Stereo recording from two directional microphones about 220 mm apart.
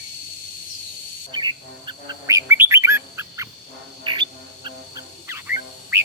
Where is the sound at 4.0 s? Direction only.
20° right (ahead or behind).